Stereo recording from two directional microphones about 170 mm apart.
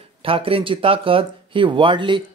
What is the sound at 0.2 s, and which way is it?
Speech, 30° right (ahead or behind).